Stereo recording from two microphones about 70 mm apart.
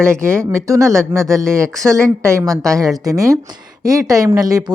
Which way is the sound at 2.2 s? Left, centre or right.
Right.